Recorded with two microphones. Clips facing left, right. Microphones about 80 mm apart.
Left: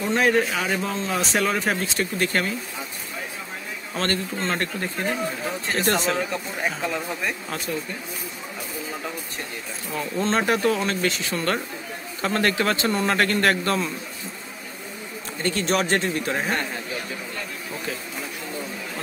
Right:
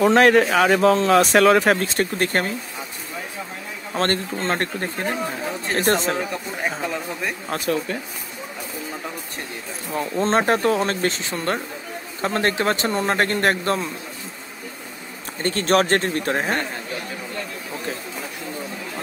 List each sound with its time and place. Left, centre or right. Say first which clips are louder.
0.0 s speech: right 6 dB; right
3.9 s speech: right 4 dB; right
7.6 s speech: right 8 dB; right
9.9 s speech: right 4 dB; right
15.4 s speech: right 4 dB; right